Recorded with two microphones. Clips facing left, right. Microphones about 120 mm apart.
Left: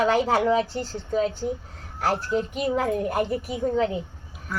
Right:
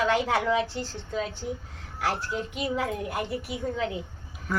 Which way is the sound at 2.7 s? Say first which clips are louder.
Left 6 dB; 45° left (ahead or behind).